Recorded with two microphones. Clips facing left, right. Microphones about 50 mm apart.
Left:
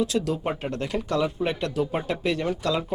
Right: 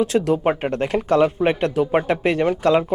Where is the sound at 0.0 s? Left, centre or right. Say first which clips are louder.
Right 7 dB; right.